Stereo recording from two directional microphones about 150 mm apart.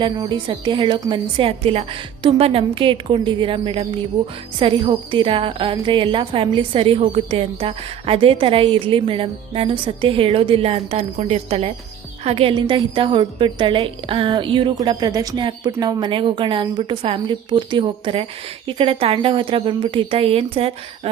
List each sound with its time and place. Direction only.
0.0 s a woman's voice: 30° right (ahead or behind)